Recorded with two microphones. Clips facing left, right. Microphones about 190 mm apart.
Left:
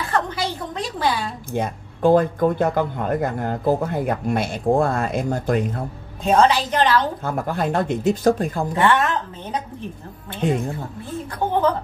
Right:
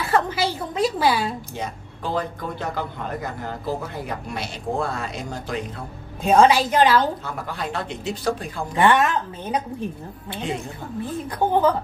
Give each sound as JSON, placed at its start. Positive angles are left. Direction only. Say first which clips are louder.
{"t": 0.0, "sound": "a woman's voice", "louder": "right 2 dB", "side_deg": -5}
{"t": 1.5, "sound": "speech", "louder": "left 6 dB", "side_deg": 50}
{"t": 6.2, "sound": "a woman's voice", "louder": "right 1 dB", "side_deg": -10}
{"t": 7.2, "sound": "speech", "louder": "left 7 dB", "side_deg": 50}
{"t": 8.7, "sound": "a woman's voice", "louder": "right 1 dB", "side_deg": -15}